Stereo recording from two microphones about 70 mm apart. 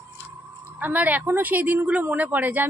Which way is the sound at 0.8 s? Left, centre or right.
Right.